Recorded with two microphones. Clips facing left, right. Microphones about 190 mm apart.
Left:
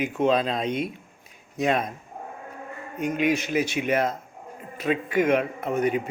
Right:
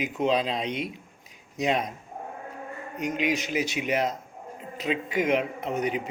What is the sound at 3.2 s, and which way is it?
Speech, 50° left (ahead or behind).